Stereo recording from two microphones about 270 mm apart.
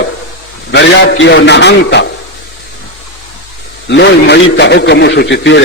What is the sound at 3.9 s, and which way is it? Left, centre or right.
A man's voice, left.